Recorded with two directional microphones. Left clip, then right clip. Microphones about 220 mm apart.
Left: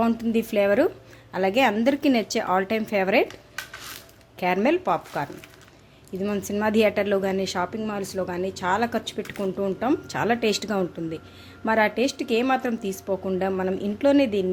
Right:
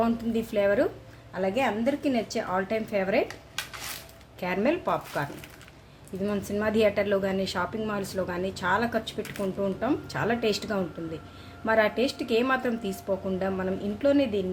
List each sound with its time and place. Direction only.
0.0 s a woman's voice: 35° left (ahead or behind)
3.2 s a sound: centre (ahead or behind)
4.4 s a woman's voice: 35° left (ahead or behind)
6.2 s a woman's voice: 30° left (ahead or behind)